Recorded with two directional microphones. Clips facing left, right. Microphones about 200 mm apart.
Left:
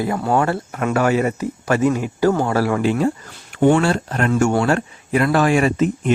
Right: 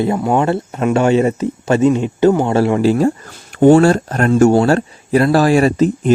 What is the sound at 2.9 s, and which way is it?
Speech, 40° right (ahead or behind).